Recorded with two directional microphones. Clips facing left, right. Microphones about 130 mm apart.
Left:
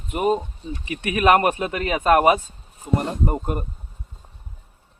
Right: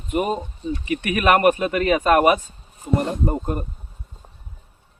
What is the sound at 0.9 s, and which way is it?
Speech, 25° left (ahead or behind).